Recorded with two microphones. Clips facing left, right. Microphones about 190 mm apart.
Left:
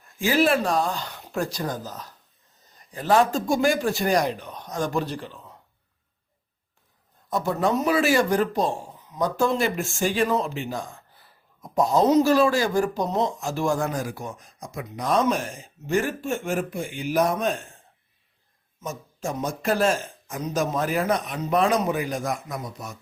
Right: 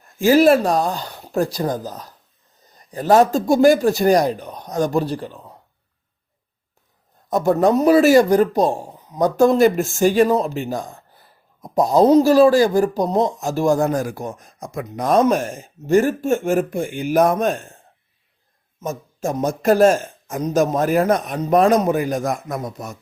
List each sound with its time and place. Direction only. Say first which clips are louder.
0.2 s speech: right 8 dB; 40° right (ahead or behind)
7.3 s speech: right 8 dB; 45° right (ahead or behind)
18.8 s speech: right 7 dB; 45° right (ahead or behind)